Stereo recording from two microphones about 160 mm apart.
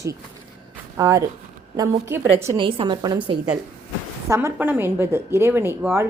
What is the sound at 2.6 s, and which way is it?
Speech, 30° right (ahead or behind).